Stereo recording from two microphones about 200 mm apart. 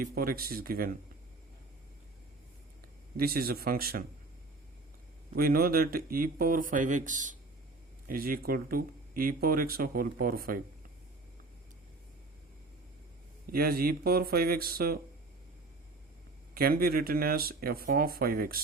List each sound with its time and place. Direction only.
0.0 s speech: 45° right (ahead or behind)
3.2 s speech: 50° right (ahead or behind)
5.3 s speech: 50° right (ahead or behind)
13.5 s speech: 50° right (ahead or behind)
16.6 s speech: 50° right (ahead or behind)